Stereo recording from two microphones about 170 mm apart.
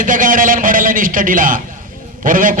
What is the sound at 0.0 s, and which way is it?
A man's voice, 50° right (ahead or behind).